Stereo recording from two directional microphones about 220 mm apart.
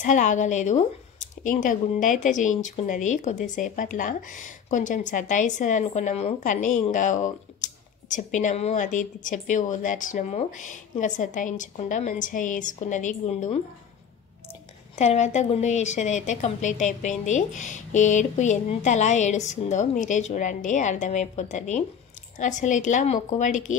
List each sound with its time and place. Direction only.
0.0 s speech: 35° left (ahead or behind)
15.0 s speech: 30° left (ahead or behind)